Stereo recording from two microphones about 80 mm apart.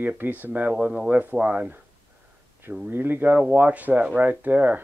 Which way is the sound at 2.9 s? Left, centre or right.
Right.